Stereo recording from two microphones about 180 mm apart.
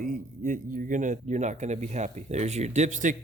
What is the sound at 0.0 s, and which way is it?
Speech, 45° right (ahead or behind).